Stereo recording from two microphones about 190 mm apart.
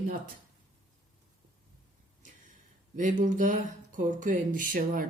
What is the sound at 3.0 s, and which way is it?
Speech, 40° right (ahead or behind).